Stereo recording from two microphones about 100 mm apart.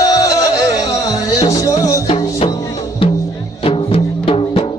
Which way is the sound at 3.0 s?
70° left (ahead or behind).